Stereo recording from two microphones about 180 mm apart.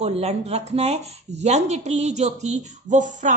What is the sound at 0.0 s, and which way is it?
Speech, 35° right (ahead or behind).